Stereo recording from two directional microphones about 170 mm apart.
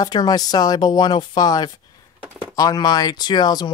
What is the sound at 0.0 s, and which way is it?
Speech, 25° left (ahead or behind).